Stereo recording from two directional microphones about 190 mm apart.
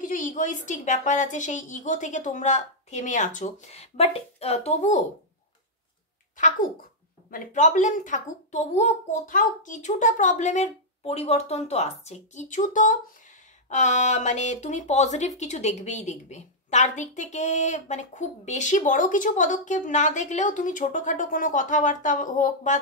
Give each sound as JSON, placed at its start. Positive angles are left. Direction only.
{"t": 0.0, "sound": "speech", "side_deg": 45}
{"t": 6.3, "sound": "speech", "side_deg": 40}